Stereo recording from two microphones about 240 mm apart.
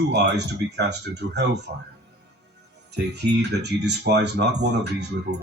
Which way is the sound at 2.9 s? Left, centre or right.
Right.